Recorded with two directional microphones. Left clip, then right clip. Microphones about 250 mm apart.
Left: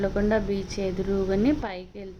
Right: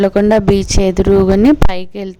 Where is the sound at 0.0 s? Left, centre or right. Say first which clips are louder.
Right 14 dB; right.